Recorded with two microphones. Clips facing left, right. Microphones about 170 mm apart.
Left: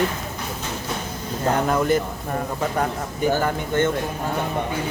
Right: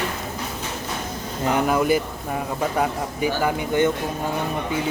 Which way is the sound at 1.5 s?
10° right (ahead or behind).